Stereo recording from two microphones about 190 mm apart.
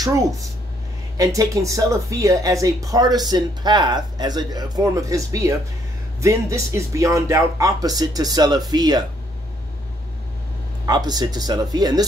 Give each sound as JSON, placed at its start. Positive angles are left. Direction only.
{"t": 1.1, "sound": "speech", "side_deg": -20}
{"t": 10.9, "sound": "speech", "side_deg": -20}